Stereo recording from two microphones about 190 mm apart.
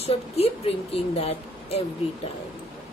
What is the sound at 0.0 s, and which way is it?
Speech, 35° left (ahead or behind).